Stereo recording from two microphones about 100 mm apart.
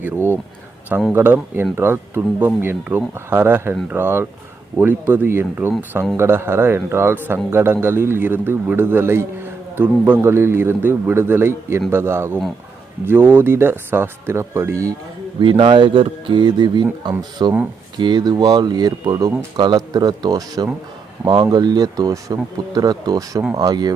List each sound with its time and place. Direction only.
0.0 s speech: 20° right (ahead or behind)
15.5 s speech: 65° right (ahead or behind); by 23.9 s 40° right (ahead or behind)